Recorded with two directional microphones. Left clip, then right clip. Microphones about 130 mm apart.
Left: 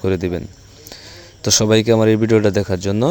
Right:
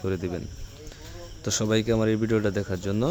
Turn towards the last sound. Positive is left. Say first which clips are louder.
# left 10 dB
turn(degrees=40)  # may be behind; listen again after turning